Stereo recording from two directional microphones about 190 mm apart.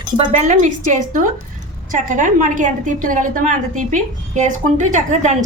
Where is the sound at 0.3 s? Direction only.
40° right (ahead or behind).